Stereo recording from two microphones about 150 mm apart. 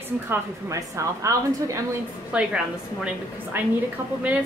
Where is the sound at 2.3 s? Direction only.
5° right (ahead or behind).